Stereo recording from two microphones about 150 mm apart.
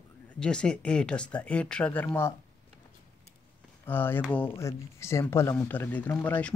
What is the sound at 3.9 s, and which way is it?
Speech, 15° left (ahead or behind).